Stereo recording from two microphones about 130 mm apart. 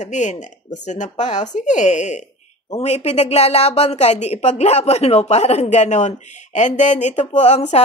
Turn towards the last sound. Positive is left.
turn(degrees=60)  # may be behind; listen again after turning